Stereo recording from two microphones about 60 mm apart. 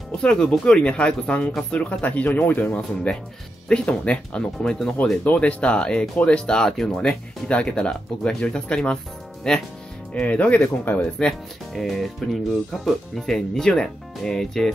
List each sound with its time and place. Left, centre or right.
0.2 s speech: centre
7.4 s speech: centre
11.7 s speech: centre